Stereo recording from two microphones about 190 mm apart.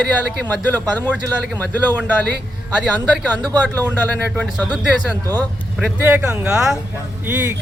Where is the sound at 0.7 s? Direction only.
10° left (ahead or behind).